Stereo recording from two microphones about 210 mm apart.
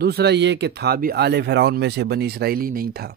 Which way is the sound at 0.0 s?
50° right (ahead or behind).